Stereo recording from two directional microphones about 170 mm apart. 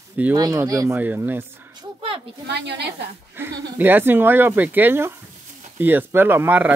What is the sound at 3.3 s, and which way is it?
Speech, 15° right (ahead or behind).